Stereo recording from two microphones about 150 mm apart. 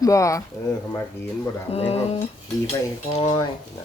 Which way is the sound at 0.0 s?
20° left (ahead or behind).